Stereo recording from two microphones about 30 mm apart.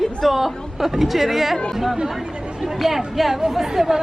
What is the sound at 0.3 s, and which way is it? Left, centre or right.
A woman's voice, centre.